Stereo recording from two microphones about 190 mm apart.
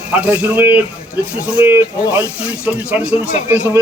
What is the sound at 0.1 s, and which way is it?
Speech, 5° right (ahead or behind).